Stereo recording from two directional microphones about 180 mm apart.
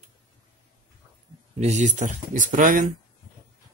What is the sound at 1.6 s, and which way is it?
Speech, 40° right (ahead or behind).